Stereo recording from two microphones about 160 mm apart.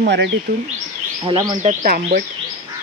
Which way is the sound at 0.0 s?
90° right.